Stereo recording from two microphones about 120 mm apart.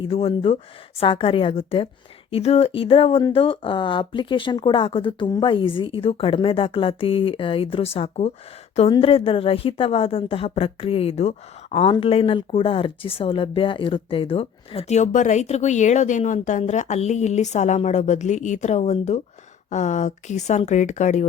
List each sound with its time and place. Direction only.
0.0 s a woman's voice: 50° left (ahead or behind)
19.7 s speech: 80° left